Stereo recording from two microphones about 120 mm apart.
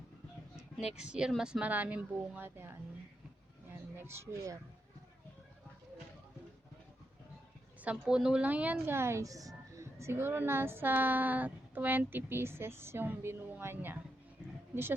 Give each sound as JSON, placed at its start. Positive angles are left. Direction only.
{"t": 0.9, "sound": "a woman's voice", "side_deg": -5}
{"t": 3.9, "sound": "speech", "side_deg": -20}
{"t": 7.8, "sound": "a woman's voice", "side_deg": -10}